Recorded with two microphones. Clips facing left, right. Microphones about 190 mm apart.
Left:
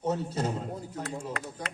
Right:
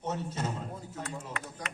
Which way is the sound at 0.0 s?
35° left (ahead or behind).